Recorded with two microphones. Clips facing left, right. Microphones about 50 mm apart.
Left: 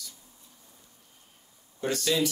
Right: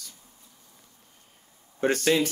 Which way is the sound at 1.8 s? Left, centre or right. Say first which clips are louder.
Right 4 dB; right.